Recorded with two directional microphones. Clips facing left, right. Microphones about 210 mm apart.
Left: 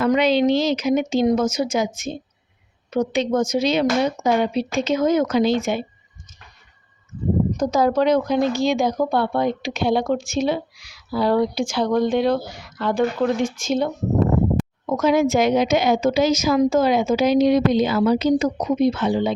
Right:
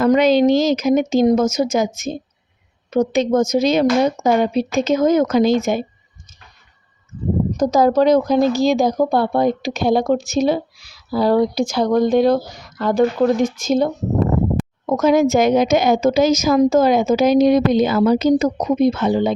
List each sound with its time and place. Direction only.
0.0 s a woman's voice: 45° right (ahead or behind)
7.5 s a woman's voice: 35° right (ahead or behind)